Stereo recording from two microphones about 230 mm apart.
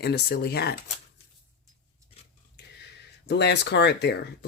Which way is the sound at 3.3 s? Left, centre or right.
Left.